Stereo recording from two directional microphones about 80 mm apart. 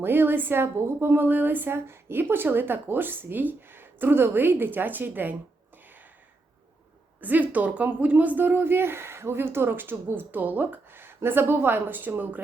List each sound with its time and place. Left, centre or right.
0.0 s speech: right
7.2 s a woman's voice: right